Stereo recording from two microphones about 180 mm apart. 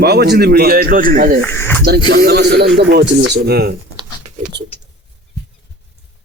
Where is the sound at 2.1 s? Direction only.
60° right (ahead or behind).